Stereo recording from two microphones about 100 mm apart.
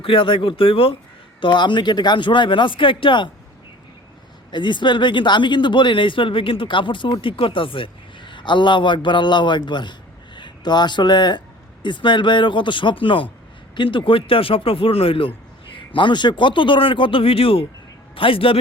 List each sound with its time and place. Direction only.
0.0 s speech: 60° left (ahead or behind)
1.4 s speech: 50° left (ahead or behind)
4.5 s speech: 50° left (ahead or behind); by 15.3 s 65° left (ahead or behind)
15.7 s speech: 55° left (ahead or behind)